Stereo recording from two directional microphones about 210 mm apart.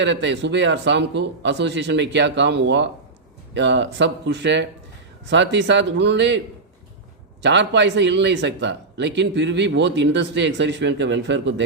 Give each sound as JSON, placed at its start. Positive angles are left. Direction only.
{"t": 0.0, "sound": "a man's voice", "side_deg": -60}
{"t": 7.4, "sound": "a man's voice", "side_deg": -55}